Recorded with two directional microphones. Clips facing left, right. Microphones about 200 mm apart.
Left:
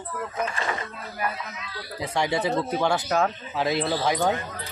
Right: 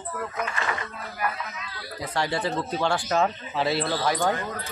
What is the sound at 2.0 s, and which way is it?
Speech, 20° left (ahead or behind).